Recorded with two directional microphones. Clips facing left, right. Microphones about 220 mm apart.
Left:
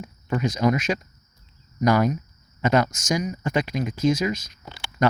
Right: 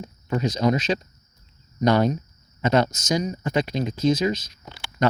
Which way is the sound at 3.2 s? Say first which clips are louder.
Right 2 dB; 35° right (ahead or behind).